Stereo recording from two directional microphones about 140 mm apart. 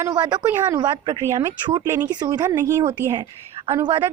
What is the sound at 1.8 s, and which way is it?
Speech, 20° right (ahead or behind).